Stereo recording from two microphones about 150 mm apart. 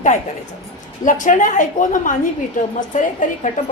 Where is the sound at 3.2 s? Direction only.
60° left (ahead or behind).